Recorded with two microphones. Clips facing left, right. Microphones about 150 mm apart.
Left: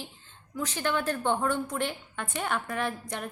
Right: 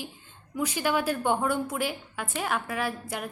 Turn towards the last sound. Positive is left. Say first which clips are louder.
# right 1 dB
turn(degrees=-5)  # may be behind; listen again after turning